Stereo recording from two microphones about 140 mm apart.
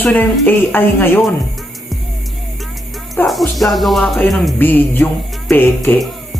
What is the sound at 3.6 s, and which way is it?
Speech, centre (ahead or behind).